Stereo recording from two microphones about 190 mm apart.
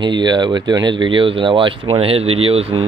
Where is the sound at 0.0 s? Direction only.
25° right (ahead or behind).